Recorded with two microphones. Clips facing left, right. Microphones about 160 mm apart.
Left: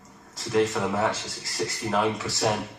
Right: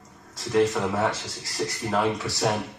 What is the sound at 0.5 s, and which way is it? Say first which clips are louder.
Speech: right 1 dB; centre (ahead or behind).